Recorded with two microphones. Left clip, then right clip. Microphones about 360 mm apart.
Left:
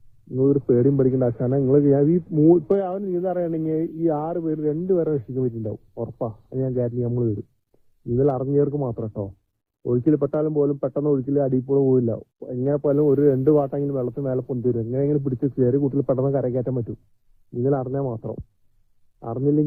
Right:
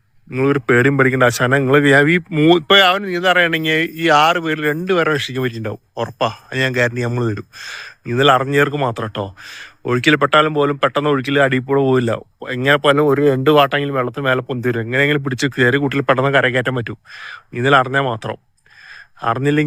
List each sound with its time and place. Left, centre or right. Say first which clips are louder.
0.3 s speech: right 5 dB; right